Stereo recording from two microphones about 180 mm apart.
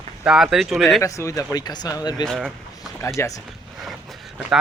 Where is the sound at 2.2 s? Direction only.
Centre (ahead or behind).